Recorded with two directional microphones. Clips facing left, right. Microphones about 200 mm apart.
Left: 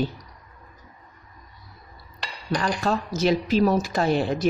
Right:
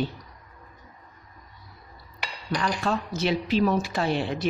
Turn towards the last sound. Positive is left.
turn(degrees=40)  # may be behind; listen again after turning